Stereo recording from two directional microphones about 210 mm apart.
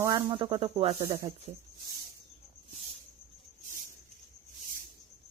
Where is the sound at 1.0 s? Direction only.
15° right (ahead or behind).